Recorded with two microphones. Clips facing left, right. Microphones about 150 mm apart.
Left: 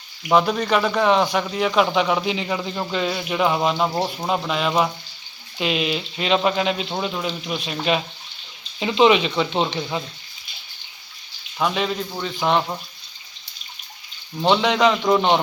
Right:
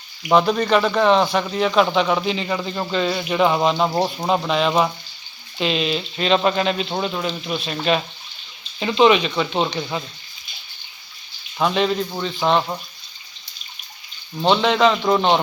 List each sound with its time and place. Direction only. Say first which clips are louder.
0.2 s speech: right 2 dB; centre (ahead or behind)
3.9 s speech: right 3 dB; 15° right (ahead or behind)
4.3 s speech: right 4 dB; 5° left (ahead or behind)
11.6 s speech: right 3 dB; 5° left (ahead or behind)
14.5 s speech: right 1 dB; 10° left (ahead or behind)